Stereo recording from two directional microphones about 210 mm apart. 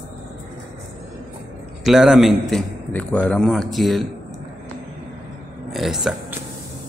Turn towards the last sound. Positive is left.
turn(degrees=-5)  # may be behind; listen again after turning